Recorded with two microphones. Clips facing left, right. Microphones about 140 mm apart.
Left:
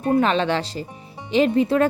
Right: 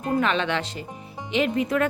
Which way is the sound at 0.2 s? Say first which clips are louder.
Left 4 dB; 35° left (ahead or behind).